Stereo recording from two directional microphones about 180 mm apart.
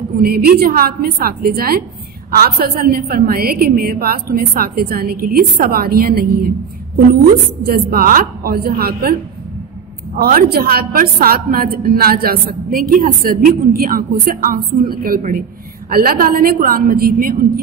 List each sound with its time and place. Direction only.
0.2 s a woman's voice: 60° right (ahead or behind)
7.6 s a woman's voice: 60° right (ahead or behind)
10.1 s a woman's voice: 60° right (ahead or behind)